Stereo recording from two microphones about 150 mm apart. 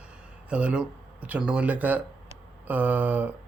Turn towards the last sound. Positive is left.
turn(degrees=-10)  # may be behind; listen again after turning